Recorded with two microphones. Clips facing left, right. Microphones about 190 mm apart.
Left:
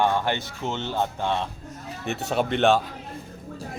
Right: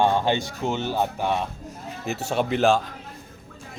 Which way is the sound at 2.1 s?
Centre (ahead or behind).